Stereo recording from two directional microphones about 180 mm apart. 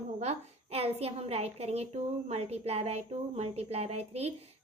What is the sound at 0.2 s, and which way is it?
A woman's voice, 35° right (ahead or behind).